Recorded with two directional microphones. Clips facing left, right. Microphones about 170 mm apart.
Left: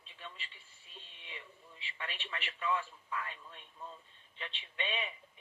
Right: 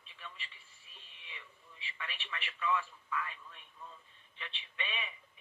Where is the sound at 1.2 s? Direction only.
25° left (ahead or behind).